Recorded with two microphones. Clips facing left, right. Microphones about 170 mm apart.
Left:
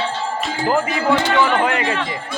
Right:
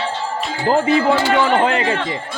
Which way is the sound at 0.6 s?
30° right (ahead or behind).